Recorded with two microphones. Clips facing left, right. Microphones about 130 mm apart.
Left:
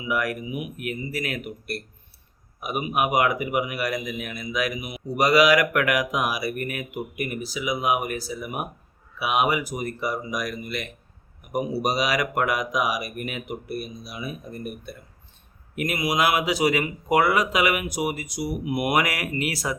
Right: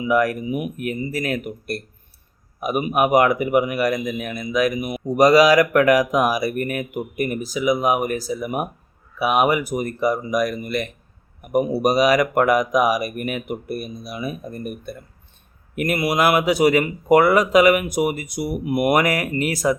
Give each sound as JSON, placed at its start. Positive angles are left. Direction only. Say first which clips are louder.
{"t": 0.0, "sound": "a man's voice", "louder": "right 8 dB", "side_deg": -40}